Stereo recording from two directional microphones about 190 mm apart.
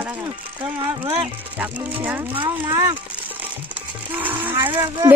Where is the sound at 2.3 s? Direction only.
20° right (ahead or behind).